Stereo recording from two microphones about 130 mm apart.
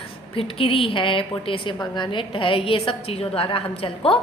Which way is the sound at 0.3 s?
45° left (ahead or behind).